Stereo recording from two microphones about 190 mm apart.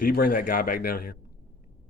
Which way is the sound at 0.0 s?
50° left (ahead or behind).